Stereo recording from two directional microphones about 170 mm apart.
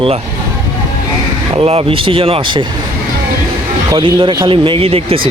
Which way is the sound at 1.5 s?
35° right (ahead or behind).